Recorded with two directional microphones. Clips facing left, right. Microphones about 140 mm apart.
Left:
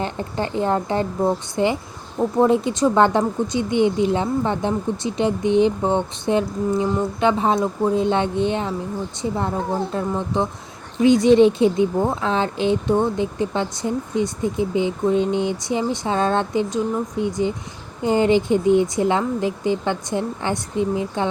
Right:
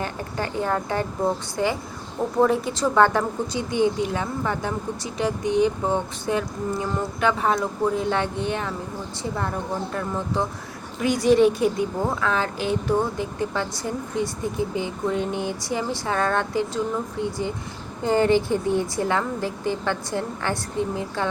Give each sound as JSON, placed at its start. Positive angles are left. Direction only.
{"t": 0.0, "sound": "speech", "side_deg": 25}